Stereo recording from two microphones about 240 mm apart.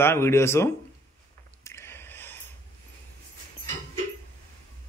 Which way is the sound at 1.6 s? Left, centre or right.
Centre.